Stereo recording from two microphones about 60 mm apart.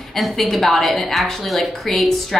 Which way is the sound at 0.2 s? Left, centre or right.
Centre.